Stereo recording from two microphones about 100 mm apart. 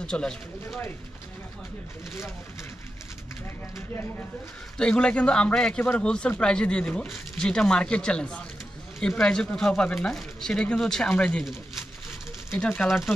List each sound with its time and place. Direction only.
0.0 s speech: 10° left (ahead or behind)
3.7 s speech: 25° left (ahead or behind)
4.7 s speech: 10° left (ahead or behind)
12.5 s speech: 10° left (ahead or behind)
12.8 s speech: centre (ahead or behind)